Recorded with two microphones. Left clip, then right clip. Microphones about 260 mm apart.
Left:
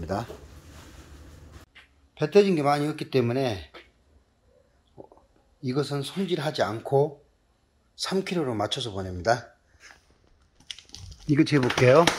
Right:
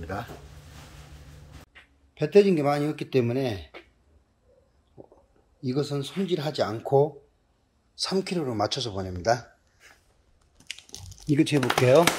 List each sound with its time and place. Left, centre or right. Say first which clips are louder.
0.0 s speech: left 4 dB; left
1.7 s speech: even; centre
5.6 s speech: even; centre
11.3 s speech: left 1 dB; centre